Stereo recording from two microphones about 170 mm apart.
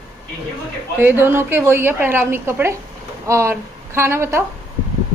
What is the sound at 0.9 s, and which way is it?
A woman's voice, 10° right (ahead or behind).